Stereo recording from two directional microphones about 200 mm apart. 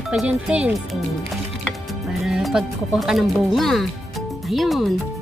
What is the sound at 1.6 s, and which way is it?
Music, centre (ahead or behind).